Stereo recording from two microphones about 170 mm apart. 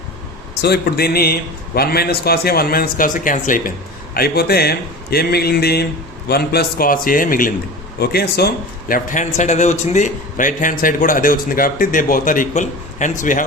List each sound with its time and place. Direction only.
0.6 s a man's voice: 70° left (ahead or behind); by 3.7 s 50° left (ahead or behind)
4.1 s a man's voice: 65° left (ahead or behind)
7.9 s a man's voice: 70° left (ahead or behind); by 13.4 s 50° left (ahead or behind)